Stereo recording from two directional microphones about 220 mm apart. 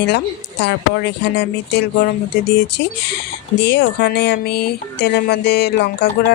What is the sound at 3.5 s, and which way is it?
Speech, 50° left (ahead or behind).